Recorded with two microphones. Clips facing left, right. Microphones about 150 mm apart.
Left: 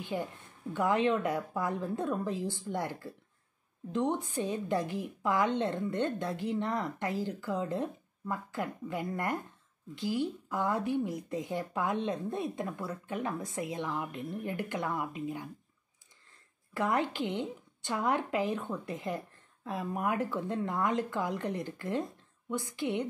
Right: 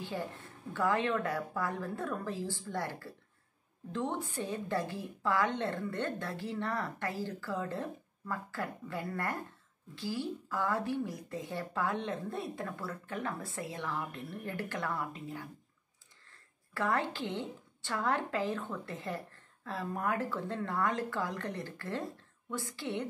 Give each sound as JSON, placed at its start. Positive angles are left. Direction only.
{"t": 0.1, "sound": "a woman's voice", "side_deg": 20}